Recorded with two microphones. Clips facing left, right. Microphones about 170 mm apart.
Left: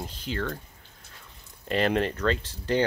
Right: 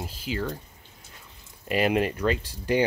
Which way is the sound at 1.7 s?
10° right (ahead or behind).